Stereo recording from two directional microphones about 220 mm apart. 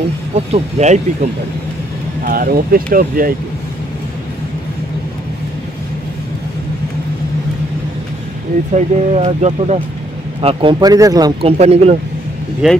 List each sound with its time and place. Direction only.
0.5 s speech: 30° right (ahead or behind)
2.2 s speech: 40° right (ahead or behind)
8.7 s speech: 30° right (ahead or behind)
11.5 s speech: 30° right (ahead or behind)
12.6 s speech: centre (ahead or behind)